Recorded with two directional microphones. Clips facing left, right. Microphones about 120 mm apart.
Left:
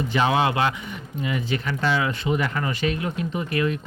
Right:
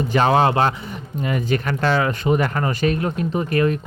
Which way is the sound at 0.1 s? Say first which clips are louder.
Right 5 dB; 45° right (ahead or behind).